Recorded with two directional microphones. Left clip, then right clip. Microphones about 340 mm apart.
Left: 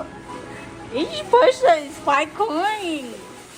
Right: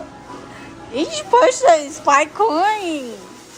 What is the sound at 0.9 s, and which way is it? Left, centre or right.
A woman's voice, centre.